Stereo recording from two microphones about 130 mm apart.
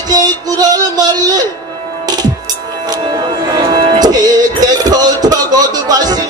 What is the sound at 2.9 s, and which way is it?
Music, 35° right (ahead or behind).